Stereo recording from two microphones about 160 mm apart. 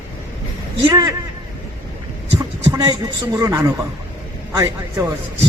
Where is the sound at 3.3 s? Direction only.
20° right (ahead or behind).